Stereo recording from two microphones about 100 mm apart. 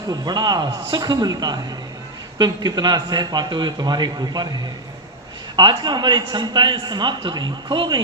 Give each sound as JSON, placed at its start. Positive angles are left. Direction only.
{"t": 0.1, "sound": "a man's voice", "side_deg": -45}
{"t": 5.5, "sound": "a man's voice", "side_deg": -45}